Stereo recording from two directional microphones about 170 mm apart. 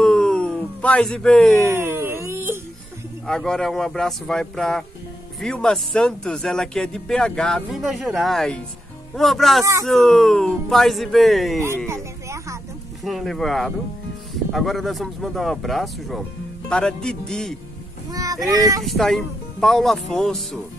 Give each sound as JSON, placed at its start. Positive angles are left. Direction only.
{"t": 0.0, "sound": "a sound", "side_deg": 5}
{"t": 1.7, "sound": "wail", "side_deg": -15}
{"t": 3.3, "sound": "speech", "side_deg": 5}
{"t": 11.9, "sound": "a sound", "side_deg": -15}
{"t": 13.0, "sound": "speech", "side_deg": 0}
{"t": 18.1, "sound": "speech", "side_deg": -20}
{"t": 18.9, "sound": "speech", "side_deg": 0}